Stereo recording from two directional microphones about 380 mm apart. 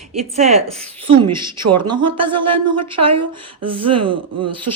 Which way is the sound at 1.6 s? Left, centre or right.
Right.